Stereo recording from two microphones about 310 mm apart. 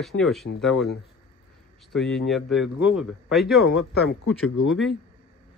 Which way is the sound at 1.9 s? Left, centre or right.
Centre.